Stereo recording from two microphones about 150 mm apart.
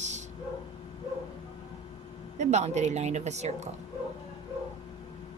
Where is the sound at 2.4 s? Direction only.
50° right (ahead or behind).